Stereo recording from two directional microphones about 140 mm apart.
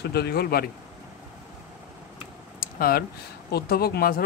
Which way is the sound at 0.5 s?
90° left.